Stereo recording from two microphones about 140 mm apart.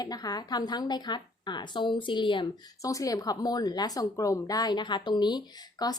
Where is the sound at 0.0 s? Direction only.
30° left (ahead or behind).